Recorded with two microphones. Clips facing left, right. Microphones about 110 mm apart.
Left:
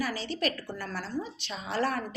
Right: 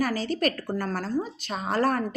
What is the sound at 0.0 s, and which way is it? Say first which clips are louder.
A woman's voice: right 6 dB; 45° right (ahead or behind).